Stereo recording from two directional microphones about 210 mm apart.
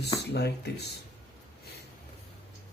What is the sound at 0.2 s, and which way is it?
Speech, 50° left (ahead or behind).